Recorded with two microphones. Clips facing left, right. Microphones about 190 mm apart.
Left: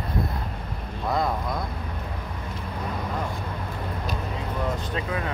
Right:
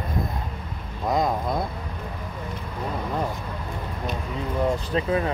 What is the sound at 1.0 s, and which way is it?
Speech, 20° right (ahead or behind).